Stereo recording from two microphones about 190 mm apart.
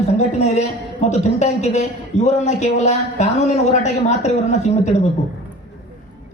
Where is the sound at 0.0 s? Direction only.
35° left (ahead or behind).